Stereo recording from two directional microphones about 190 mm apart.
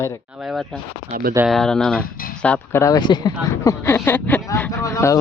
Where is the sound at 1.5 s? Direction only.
Centre (ahead or behind).